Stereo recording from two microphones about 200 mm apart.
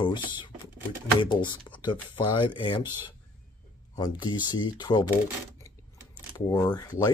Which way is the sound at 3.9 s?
20° left (ahead or behind).